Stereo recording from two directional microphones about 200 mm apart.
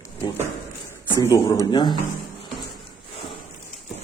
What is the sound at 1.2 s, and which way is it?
Speech, 15° left (ahead or behind).